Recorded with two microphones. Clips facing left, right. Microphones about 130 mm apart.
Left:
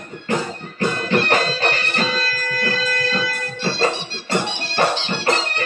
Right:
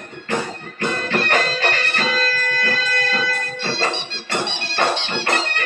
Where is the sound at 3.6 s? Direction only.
35° left (ahead or behind).